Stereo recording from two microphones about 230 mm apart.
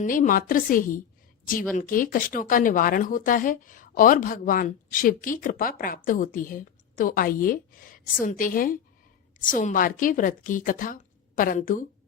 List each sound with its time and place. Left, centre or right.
0.0 s speech: left